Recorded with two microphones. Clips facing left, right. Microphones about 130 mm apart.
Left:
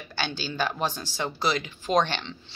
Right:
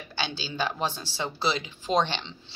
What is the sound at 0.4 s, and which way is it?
Speech, 25° right (ahead or behind).